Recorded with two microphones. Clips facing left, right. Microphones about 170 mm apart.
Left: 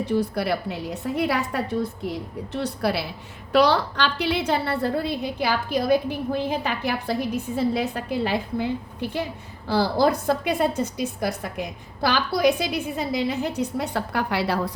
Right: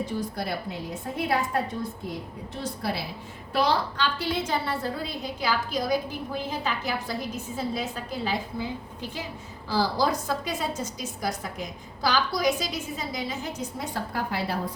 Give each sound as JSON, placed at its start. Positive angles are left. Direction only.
{"t": 0.0, "sound": "a woman's voice", "side_deg": 65}